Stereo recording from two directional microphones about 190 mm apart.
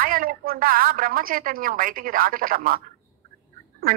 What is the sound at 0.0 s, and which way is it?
A woman's voice, 45° right (ahead or behind).